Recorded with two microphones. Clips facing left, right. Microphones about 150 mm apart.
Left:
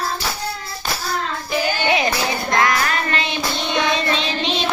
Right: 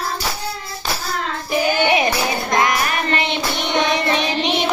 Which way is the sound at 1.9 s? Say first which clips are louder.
Right 2 dB; 20° right (ahead or behind).